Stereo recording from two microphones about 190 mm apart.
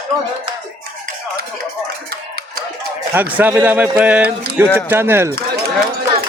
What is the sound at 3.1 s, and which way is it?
Speech, 10° right (ahead or behind).